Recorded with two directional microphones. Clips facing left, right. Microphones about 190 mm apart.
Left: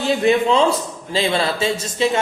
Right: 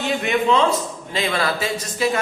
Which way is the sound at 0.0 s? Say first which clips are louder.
Left 4 dB; 30° left (ahead or behind).